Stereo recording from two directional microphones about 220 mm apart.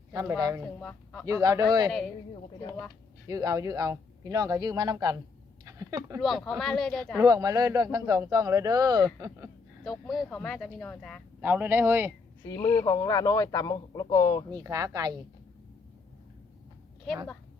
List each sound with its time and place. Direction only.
0.1 s speech: 15° right (ahead or behind)
0.8 s a man's voice: 5° left (ahead or behind)
1.2 s speech: 15° right (ahead or behind)
3.2 s speech: 15° right (ahead or behind)
5.6 s a sound: 15° right (ahead or behind)
6.1 s speech: centre (ahead or behind)
7.2 s speech: 15° right (ahead or behind)
9.8 s speech: centre (ahead or behind)
11.3 s speech: 5° right (ahead or behind)
12.5 s a man's voice: 15° left (ahead or behind)
14.5 s speech: 15° right (ahead or behind)